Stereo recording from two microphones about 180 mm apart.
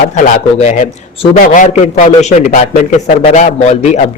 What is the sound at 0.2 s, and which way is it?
A man's voice, 40° left (ahead or behind).